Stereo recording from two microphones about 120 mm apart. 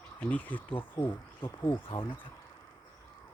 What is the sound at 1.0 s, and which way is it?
Speech, 25° left (ahead or behind).